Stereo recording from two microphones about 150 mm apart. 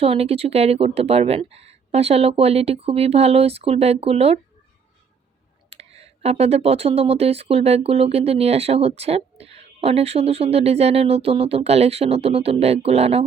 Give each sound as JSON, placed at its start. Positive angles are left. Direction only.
{"t": 0.0, "sound": "speech", "side_deg": -40}
{"t": 5.7, "sound": "speech", "side_deg": -45}